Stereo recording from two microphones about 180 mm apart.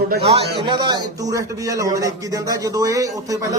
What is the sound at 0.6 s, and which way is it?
A man's voice, 25° right (ahead or behind).